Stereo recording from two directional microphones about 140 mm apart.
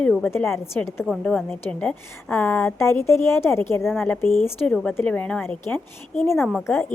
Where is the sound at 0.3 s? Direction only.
15° left (ahead or behind).